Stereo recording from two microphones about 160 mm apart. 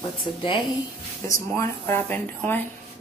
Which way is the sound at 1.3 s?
15° left (ahead or behind).